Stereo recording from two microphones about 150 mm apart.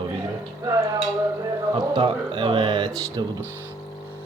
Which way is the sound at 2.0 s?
35° right (ahead or behind).